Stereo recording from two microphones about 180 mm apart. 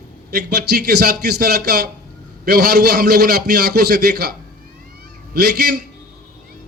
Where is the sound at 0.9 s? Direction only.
60° right (ahead or behind).